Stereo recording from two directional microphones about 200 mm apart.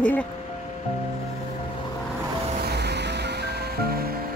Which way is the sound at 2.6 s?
55° right (ahead or behind).